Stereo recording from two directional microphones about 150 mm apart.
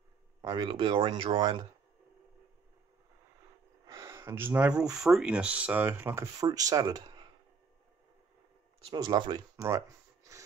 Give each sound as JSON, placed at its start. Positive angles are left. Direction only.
{"t": 0.4, "sound": "speech", "side_deg": -30}
{"t": 3.8, "sound": "a sound", "side_deg": -20}
{"t": 5.0, "sound": "speech", "side_deg": -5}
{"t": 8.9, "sound": "speech", "side_deg": -30}